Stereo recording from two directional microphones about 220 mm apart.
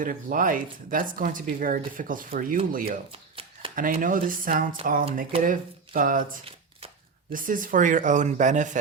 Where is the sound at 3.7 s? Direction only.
40° right (ahead or behind).